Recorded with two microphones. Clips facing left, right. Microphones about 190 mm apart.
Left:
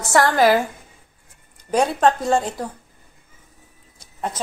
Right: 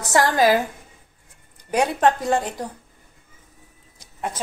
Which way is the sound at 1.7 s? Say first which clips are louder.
Left 1 dB; 15° right (ahead or behind).